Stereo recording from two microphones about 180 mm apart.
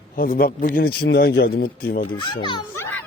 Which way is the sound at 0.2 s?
55° left (ahead or behind).